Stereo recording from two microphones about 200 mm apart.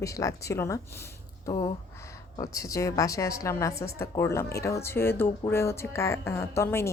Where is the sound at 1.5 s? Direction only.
25° left (ahead or behind).